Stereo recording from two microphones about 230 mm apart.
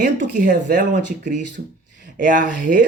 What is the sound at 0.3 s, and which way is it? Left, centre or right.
Speech, right.